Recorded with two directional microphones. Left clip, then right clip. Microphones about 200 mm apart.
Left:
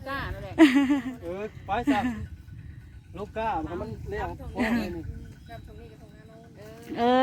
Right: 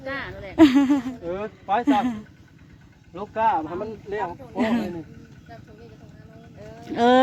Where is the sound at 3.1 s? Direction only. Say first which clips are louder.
Right 8 dB; 25° left (ahead or behind).